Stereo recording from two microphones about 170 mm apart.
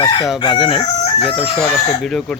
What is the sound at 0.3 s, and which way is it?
Crowing, 30° left (ahead or behind).